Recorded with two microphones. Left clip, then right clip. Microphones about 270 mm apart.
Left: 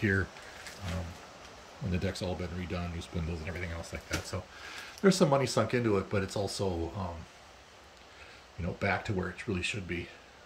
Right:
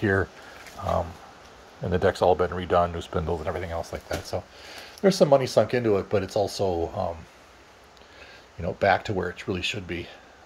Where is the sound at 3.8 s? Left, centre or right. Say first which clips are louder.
Right 6 dB; centre.